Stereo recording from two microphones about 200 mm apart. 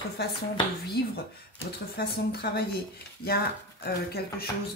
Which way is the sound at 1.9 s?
55° left (ahead or behind).